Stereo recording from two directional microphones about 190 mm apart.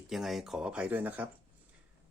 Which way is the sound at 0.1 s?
Centre (ahead or behind).